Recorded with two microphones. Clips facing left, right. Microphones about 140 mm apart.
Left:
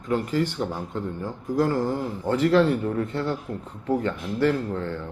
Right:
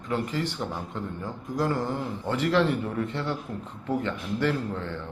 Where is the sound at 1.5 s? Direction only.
40° left (ahead or behind).